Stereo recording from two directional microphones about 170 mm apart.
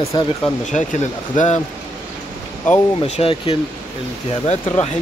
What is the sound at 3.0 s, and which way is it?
Speech, 35° left (ahead or behind).